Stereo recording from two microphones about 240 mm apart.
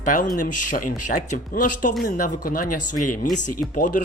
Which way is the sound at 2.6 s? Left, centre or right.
Left.